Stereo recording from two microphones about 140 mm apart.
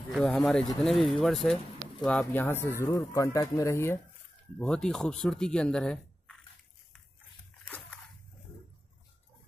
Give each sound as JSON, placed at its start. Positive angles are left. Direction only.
{"t": 0.1, "sound": "speech", "side_deg": 0}
{"t": 4.6, "sound": "speech", "side_deg": 5}
{"t": 7.6, "sound": "a sound", "side_deg": 10}